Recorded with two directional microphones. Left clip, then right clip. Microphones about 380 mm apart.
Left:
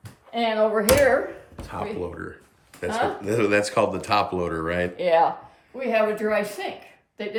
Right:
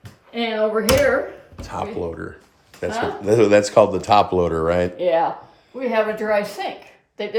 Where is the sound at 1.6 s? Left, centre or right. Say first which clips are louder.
Right 4 dB; centre.